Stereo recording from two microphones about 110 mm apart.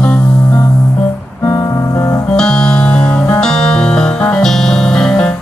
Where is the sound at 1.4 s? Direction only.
30° left (ahead or behind).